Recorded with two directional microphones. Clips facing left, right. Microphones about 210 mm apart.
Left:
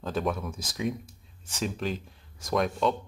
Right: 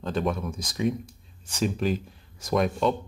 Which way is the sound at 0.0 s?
Centre (ahead or behind).